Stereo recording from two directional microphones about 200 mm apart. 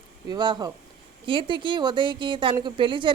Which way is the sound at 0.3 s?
20° right (ahead or behind).